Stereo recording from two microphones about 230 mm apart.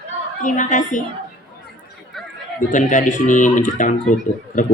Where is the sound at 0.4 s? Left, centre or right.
Left.